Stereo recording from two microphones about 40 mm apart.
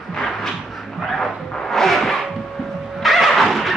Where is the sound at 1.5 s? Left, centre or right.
Centre.